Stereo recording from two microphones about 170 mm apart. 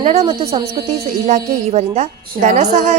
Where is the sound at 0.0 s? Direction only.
40° right (ahead or behind).